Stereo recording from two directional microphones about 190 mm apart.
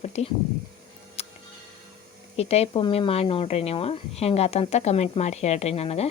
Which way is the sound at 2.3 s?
35° left (ahead or behind).